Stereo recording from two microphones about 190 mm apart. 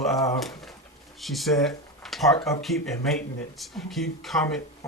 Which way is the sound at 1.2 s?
Centre (ahead or behind).